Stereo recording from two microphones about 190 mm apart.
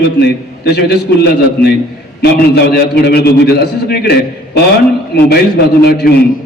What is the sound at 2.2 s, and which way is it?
A man's voice, 55° left (ahead or behind).